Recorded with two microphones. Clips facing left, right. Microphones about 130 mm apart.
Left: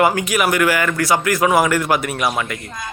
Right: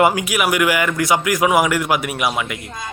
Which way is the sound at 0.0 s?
10° right (ahead or behind).